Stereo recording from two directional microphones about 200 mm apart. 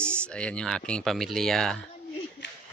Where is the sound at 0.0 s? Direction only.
5° left (ahead or behind).